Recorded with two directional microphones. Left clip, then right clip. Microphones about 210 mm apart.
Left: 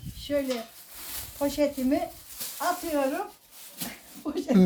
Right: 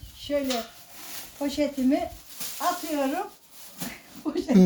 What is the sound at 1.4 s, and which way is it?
Speech, 15° left (ahead or behind).